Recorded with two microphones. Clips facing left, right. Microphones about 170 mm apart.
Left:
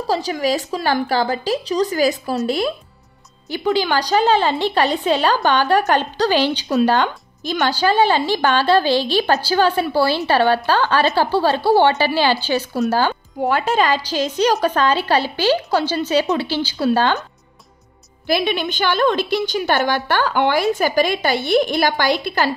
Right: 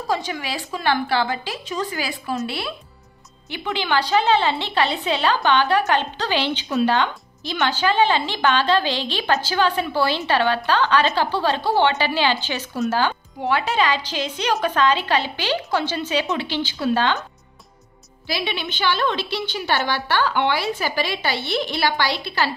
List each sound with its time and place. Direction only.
0.1 s a woman's voice: 40° left (ahead or behind)
18.2 s a woman's voice: 50° left (ahead or behind)